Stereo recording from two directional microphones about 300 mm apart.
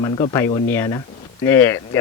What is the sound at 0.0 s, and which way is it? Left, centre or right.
Speech, centre.